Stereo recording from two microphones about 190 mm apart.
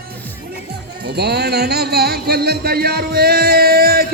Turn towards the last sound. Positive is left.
turn(degrees=-55)  # may be behind; listen again after turning